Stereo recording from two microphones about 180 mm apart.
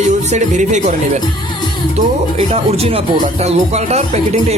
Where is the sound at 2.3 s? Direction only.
35° right (ahead or behind).